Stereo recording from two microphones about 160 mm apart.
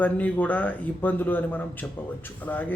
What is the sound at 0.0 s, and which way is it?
A man's voice, 10° left (ahead or behind).